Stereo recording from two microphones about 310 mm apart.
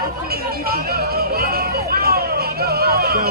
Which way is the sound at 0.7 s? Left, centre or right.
Right.